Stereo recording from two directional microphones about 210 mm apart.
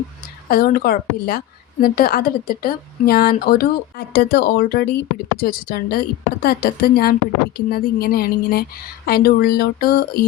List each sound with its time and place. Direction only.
0.4 s a woman's voice: 45° left (ahead or behind)